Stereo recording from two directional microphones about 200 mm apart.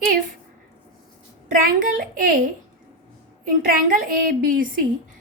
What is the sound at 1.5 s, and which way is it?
Speech, 45° right (ahead or behind).